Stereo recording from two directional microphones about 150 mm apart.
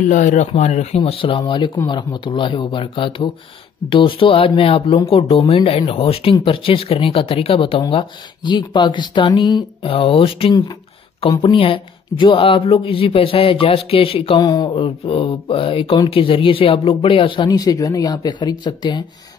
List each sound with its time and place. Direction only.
0.0 s speech: 55° left (ahead or behind); by 19.0 s 30° left (ahead or behind)